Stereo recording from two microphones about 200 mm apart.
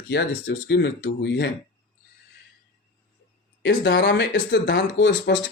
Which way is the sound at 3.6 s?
60° left (ahead or behind).